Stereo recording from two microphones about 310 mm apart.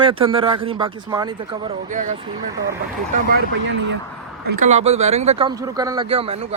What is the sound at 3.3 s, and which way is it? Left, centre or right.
Speech, right.